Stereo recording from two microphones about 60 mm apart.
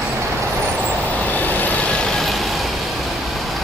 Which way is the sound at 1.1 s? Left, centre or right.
Left.